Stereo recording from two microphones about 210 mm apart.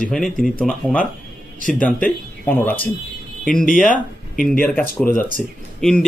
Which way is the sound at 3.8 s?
40° left (ahead or behind).